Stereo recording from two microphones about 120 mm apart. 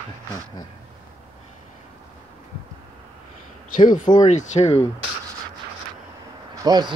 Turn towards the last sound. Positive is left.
turn(degrees=-35)  # may be behind; listen again after turning